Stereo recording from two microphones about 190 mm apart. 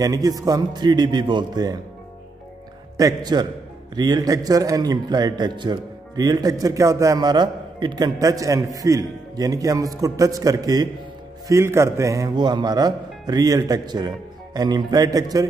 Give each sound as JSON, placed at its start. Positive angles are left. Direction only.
{"t": 0.0, "sound": "a man's voice", "side_deg": -20}
{"t": 3.0, "sound": "a man's voice", "side_deg": -20}